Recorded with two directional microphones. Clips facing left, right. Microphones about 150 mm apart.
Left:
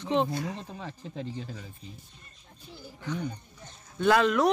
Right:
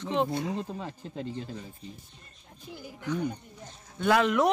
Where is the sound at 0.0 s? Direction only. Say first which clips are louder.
Left 1 dB; 5° right (ahead or behind).